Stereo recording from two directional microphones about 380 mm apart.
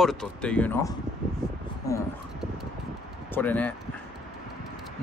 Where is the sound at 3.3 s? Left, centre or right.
Centre.